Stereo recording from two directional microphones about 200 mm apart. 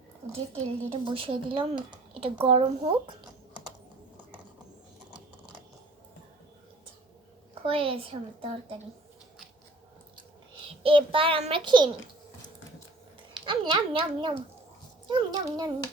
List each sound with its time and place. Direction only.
0.3 s speech: 30° right (ahead or behind)
7.6 s speech: 25° right (ahead or behind)
10.8 s speech: 25° right (ahead or behind)
13.4 s speech: 25° right (ahead or behind)